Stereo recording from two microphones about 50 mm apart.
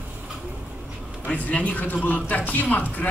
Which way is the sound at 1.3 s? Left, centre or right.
Left.